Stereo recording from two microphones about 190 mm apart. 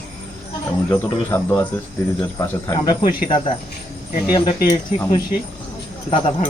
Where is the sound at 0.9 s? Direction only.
10° left (ahead or behind); by 4.5 s 30° left (ahead or behind).